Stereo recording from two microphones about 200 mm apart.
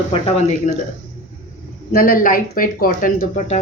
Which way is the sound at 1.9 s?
45° left (ahead or behind).